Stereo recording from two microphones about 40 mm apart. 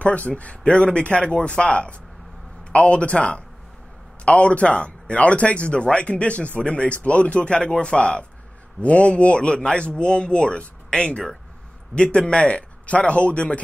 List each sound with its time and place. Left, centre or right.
0.0 s speech: left